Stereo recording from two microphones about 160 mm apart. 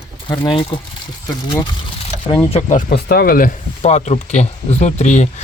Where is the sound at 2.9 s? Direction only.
70° left (ahead or behind).